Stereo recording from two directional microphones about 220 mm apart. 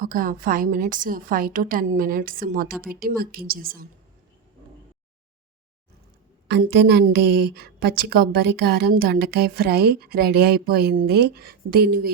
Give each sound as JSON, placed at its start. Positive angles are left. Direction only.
{"t": 0.0, "sound": "a woman's voice", "side_deg": -40}
{"t": 6.5, "sound": "a woman's voice", "side_deg": -45}